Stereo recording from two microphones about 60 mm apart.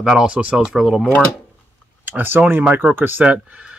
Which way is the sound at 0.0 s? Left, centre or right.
Centre.